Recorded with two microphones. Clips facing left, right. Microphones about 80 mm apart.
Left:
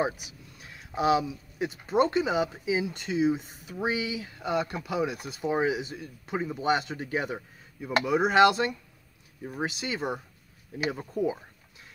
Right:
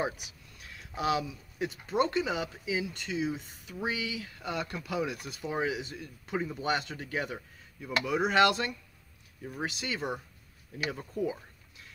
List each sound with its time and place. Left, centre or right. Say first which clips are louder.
0.0 s speech: left 4 dB; centre